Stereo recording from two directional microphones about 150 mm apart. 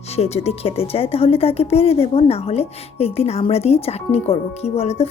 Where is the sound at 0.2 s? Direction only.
45° left (ahead or behind).